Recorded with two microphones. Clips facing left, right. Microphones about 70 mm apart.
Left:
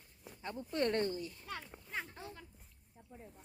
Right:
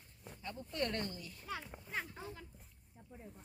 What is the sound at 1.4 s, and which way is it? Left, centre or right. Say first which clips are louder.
A child's voice: right 1 dB; centre.